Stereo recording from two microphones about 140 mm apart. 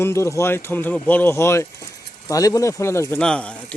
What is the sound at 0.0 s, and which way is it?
Speech, 20° left (ahead or behind).